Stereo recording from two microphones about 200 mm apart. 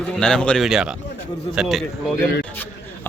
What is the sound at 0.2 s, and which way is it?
Speech, 5° left (ahead or behind).